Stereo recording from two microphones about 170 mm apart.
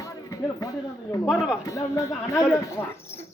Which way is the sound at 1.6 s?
20° left (ahead or behind).